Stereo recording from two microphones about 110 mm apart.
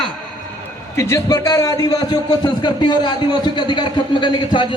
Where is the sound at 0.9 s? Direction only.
25° left (ahead or behind).